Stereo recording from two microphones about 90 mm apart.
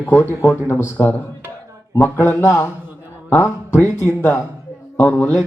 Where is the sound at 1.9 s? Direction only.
25° left (ahead or behind).